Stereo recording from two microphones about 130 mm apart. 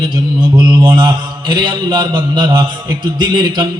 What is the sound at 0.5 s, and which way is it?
Mantra, 30° right (ahead or behind).